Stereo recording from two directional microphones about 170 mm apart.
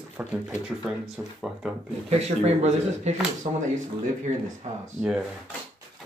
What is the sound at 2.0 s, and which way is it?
Speech, 40° right (ahead or behind).